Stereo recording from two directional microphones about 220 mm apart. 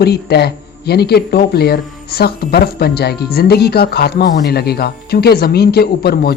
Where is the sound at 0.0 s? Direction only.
45° left (ahead or behind).